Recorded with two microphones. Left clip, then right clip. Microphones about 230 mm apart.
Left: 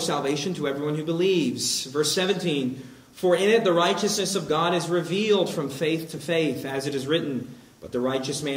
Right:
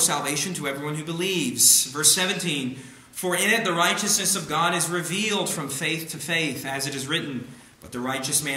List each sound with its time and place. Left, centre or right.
0.0 s a man's voice: right